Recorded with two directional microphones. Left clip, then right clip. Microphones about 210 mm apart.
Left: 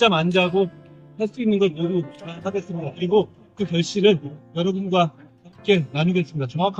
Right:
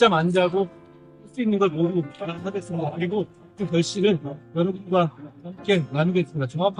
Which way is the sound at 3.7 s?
25° right (ahead or behind).